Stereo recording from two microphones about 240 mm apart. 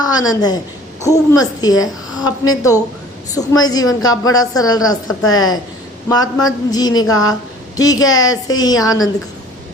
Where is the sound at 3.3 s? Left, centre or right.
Centre.